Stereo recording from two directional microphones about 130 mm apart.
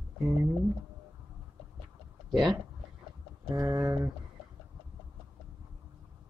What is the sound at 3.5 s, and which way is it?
Speech, 25° right (ahead or behind).